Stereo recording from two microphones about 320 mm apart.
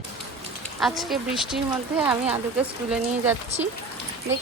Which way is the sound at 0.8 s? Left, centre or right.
Centre.